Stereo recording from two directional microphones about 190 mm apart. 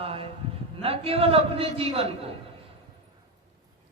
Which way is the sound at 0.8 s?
30° right (ahead or behind).